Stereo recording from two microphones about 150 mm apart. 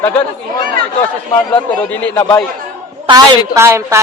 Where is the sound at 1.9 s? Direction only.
10° left (ahead or behind).